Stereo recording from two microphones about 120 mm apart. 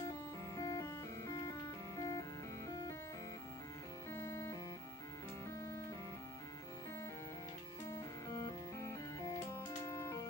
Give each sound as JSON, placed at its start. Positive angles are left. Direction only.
{"t": 0.6, "sound": "music", "side_deg": 30}
{"t": 4.1, "sound": "music", "side_deg": 20}
{"t": 7.9, "sound": "music", "side_deg": 25}